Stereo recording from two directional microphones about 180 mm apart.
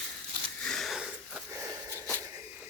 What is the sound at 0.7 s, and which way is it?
Sniff, centre (ahead or behind).